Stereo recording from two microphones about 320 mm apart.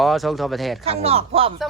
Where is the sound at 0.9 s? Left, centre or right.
Centre.